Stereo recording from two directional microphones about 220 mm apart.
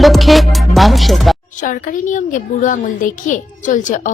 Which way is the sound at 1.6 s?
35° left (ahead or behind).